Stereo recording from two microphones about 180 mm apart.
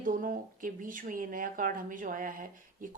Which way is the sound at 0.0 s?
50° right (ahead or behind).